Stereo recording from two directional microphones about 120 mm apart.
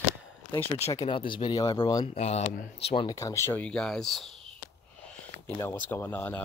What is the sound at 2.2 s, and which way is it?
Speech, 65° left (ahead or behind).